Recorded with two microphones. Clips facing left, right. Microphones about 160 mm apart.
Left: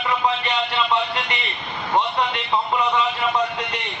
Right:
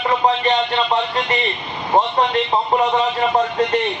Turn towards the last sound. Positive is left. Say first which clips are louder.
# right 6 dB
turn(degrees=-45)  # may be behind; listen again after turning